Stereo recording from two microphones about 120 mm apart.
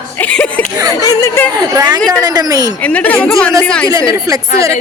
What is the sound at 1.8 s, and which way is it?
Speech, 30° right (ahead or behind).